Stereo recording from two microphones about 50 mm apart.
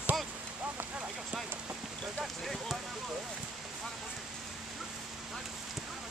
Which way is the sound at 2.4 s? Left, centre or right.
Centre.